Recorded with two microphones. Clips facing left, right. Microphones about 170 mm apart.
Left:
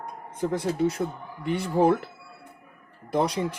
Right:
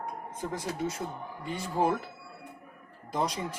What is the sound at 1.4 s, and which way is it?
Speech, 65° left (ahead or behind).